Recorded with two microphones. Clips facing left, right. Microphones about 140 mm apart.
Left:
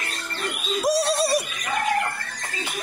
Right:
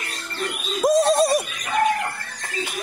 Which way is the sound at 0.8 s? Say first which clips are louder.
Right 5 dB; 50° right (ahead or behind).